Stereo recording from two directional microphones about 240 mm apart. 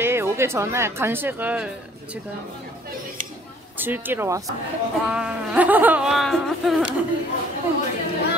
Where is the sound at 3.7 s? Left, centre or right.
Centre.